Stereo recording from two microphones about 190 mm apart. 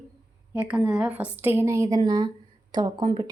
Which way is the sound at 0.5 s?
10° right (ahead or behind).